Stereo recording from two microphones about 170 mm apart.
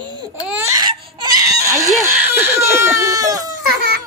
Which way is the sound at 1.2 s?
25° right (ahead or behind).